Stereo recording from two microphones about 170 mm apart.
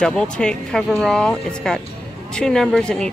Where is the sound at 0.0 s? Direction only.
5° left (ahead or behind).